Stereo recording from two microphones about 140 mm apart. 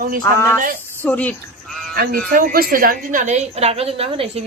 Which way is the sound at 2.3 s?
85° right.